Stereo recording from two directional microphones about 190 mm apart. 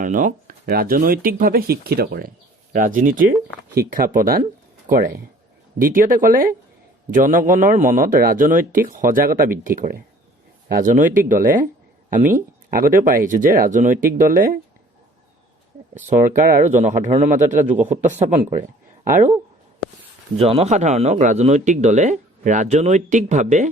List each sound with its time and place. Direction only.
0.0 s a man's voice: 40° right (ahead or behind)
16.0 s speech: 40° right (ahead or behind)
20.4 s speech: 30° right (ahead or behind)